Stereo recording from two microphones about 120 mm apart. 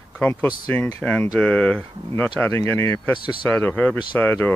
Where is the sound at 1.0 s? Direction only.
10° left (ahead or behind).